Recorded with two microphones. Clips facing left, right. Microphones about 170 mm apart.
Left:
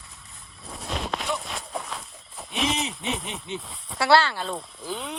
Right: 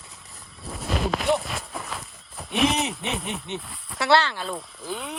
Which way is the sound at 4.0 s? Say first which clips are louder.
Left 1 dB; 20° right (ahead or behind).